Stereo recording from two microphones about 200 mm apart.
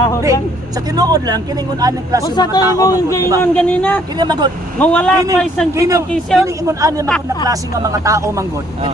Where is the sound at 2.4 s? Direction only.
20° left (ahead or behind).